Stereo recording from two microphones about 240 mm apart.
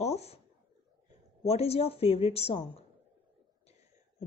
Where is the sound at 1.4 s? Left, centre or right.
Left.